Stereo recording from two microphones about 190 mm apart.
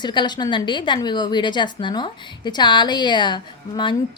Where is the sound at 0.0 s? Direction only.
25° left (ahead or behind).